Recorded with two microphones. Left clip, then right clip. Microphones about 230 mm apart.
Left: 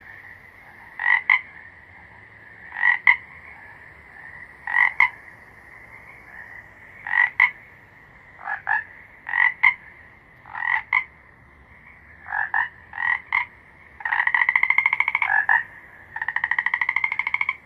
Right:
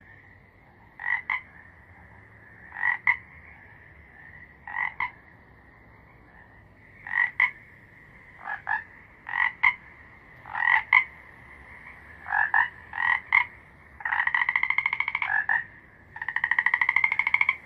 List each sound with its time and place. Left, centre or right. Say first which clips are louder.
0.9 s croak: left 9 dB; left
2.6 s croak: left 7 dB; left
4.7 s croak: left 12 dB; left
7.0 s frog: left 6 dB; left
8.4 s frog: left 6 dB; centre
9.2 s croak: left 5 dB; centre
10.4 s frog: right 1 dB; centre
14.0 s frog: left 5 dB; centre; by 15.6 s left
16.1 s frog: left 2 dB; centre